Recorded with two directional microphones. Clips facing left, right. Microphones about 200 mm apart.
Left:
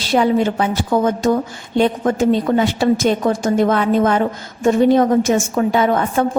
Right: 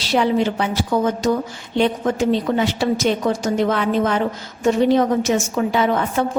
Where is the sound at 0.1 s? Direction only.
50° left (ahead or behind).